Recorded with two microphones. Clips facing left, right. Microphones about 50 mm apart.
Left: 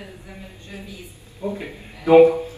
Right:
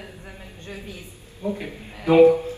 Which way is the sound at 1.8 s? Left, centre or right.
Right.